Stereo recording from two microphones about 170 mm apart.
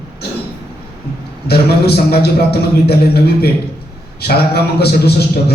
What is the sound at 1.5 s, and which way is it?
A man's voice, 70° left (ahead or behind).